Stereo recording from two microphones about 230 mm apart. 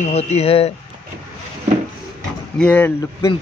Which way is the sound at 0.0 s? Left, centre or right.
Left.